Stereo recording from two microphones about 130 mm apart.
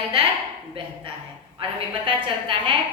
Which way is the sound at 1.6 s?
40° right (ahead or behind).